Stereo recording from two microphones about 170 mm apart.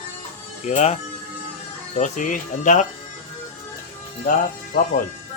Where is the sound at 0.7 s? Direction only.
40° left (ahead or behind).